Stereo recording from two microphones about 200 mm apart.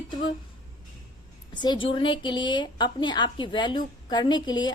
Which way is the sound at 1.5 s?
20° left (ahead or behind).